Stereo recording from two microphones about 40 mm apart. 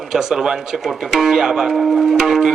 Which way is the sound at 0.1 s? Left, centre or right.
Centre.